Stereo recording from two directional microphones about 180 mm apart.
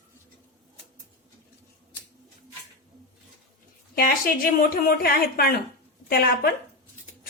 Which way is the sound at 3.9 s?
55° left (ahead or behind).